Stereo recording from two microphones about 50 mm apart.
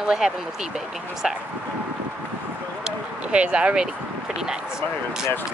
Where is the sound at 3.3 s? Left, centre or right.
Right.